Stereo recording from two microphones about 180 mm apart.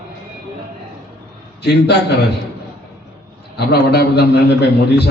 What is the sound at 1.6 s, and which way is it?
Speech, 65° left (ahead or behind).